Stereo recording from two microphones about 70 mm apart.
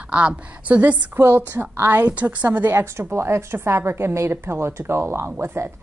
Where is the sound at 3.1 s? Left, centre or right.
Right.